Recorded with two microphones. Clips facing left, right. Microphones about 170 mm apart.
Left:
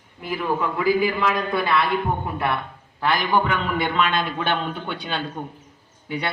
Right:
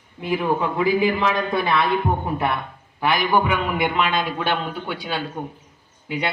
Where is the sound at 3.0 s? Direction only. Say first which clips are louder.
Right 1 dB; 15° right (ahead or behind).